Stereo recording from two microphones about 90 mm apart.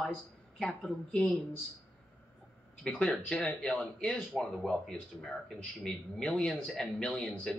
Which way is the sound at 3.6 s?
5° left (ahead or behind).